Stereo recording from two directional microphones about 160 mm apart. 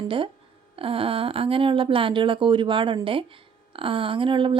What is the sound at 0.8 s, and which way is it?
A woman's voice, 35° right (ahead or behind).